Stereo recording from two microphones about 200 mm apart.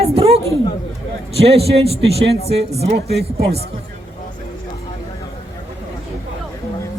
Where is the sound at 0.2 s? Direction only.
30° right (ahead or behind).